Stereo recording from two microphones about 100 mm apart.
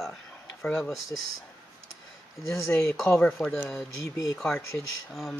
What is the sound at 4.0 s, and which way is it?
Speech, 30° left (ahead or behind).